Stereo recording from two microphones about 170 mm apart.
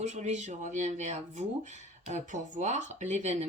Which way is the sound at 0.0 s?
45° right (ahead or behind).